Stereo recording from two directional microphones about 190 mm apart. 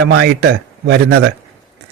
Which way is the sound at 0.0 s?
65° right (ahead or behind).